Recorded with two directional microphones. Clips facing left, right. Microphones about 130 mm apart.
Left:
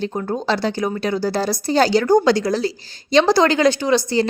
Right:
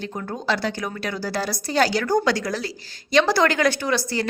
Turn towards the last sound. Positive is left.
turn(degrees=25)  # may be behind; listen again after turning